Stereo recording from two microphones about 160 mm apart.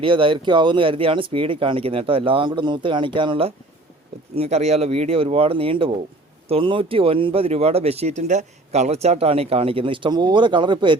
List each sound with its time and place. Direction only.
0.0 s speech: 30° right (ahead or behind)